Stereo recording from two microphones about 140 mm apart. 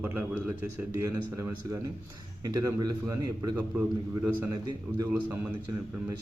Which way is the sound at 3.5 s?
10° right (ahead or behind).